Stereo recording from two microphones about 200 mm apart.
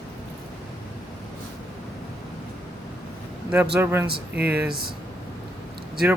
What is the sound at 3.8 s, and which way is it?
Speech, 10° right (ahead or behind).